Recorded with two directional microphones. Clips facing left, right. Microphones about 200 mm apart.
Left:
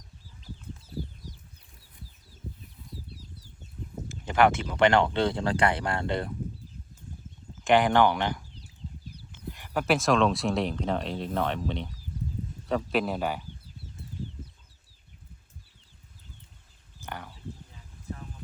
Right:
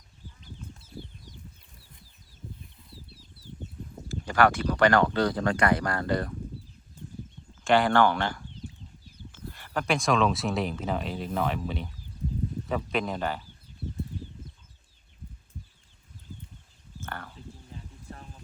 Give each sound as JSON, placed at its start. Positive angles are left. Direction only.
{"t": 0.4, "sound": "a sound", "side_deg": 35}
{"t": 3.1, "sound": "chicken", "side_deg": 40}
{"t": 4.3, "sound": "speech", "side_deg": 20}
{"t": 7.6, "sound": "speech", "side_deg": 15}
{"t": 17.1, "sound": "livestock", "side_deg": 15}